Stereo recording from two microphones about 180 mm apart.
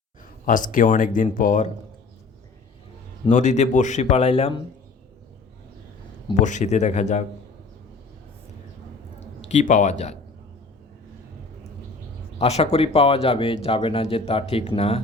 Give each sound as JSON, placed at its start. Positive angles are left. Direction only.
{"t": 0.4, "sound": "speech", "side_deg": 45}
{"t": 3.2, "sound": "speech", "side_deg": 40}
{"t": 6.4, "sound": "speech", "side_deg": 40}
{"t": 9.5, "sound": "speech", "side_deg": 45}
{"t": 12.4, "sound": "speech", "side_deg": 35}